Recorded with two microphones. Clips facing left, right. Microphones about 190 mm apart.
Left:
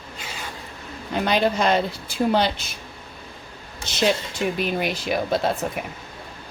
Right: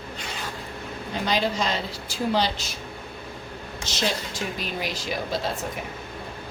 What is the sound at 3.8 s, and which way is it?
Speech, 60° left (ahead or behind).